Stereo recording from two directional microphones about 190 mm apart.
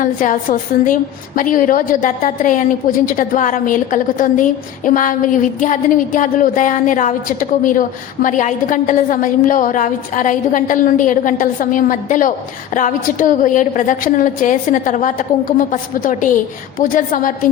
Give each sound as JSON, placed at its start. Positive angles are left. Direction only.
{"t": 0.0, "sound": "speech", "side_deg": 45}